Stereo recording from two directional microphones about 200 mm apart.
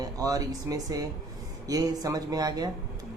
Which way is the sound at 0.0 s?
20° right (ahead or behind).